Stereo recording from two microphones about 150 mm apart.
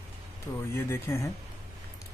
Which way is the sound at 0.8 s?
15° left (ahead or behind).